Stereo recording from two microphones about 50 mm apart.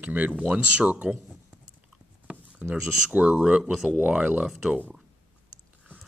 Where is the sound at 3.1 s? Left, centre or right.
Right.